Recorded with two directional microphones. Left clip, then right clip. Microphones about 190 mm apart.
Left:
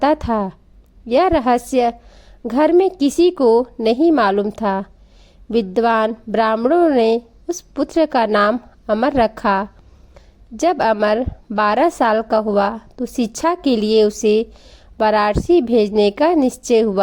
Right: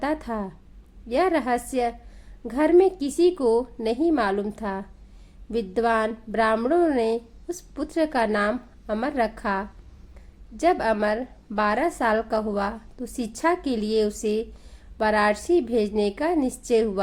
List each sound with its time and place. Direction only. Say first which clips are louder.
0.0 s a woman's voice: left 11 dB; 35° left (ahead or behind)